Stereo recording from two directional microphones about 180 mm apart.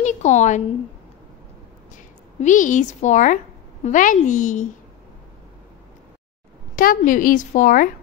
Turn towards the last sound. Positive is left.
turn(degrees=45)  # may be behind; listen again after turning